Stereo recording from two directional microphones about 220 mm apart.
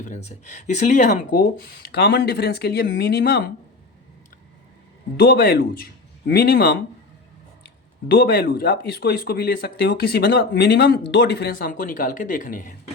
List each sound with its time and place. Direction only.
0.0 s speech: 30° left (ahead or behind)
5.1 s speech: 45° left (ahead or behind)
8.0 s speech: 45° left (ahead or behind)